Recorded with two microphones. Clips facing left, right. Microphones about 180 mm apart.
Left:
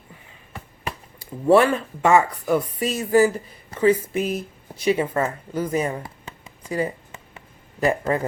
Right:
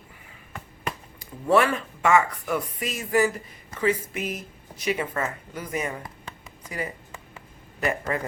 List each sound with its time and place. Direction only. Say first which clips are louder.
1.2 s speech: left 5 dB; 30° left (ahead or behind)
6.7 s a sound: left 8 dB; 30° left (ahead or behind)
7.8 s speech: left 6 dB; 30° left (ahead or behind)